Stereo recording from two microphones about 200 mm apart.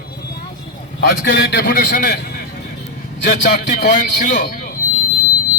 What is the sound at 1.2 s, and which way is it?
A man's voice, 55° left (ahead or behind).